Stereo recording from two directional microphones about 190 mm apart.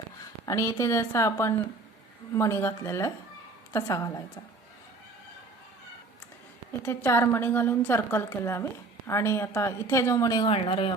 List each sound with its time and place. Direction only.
0.4 s a woman's voice: 15° left (ahead or behind)
6.8 s a woman's voice: 15° left (ahead or behind)